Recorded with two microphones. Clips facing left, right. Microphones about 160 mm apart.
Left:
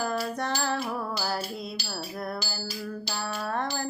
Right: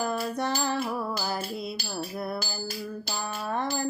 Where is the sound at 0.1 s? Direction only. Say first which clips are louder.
Right 1 dB; 5° right (ahead or behind).